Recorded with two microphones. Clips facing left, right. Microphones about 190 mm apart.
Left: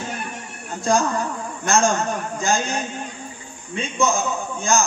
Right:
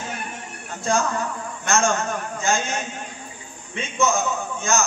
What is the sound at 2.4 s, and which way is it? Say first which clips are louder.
Speech: left 1 dB; 35° left (ahead or behind).